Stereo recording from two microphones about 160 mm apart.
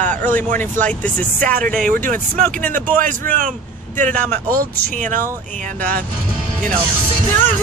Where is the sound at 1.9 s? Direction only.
60° right (ahead or behind).